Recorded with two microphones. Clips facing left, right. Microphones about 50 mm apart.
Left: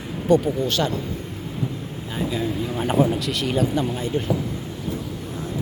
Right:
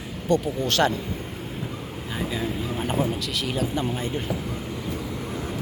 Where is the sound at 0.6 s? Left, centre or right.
Right.